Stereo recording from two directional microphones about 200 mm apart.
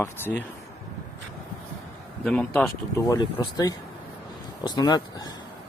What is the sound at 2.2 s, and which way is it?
Speech, centre (ahead or behind).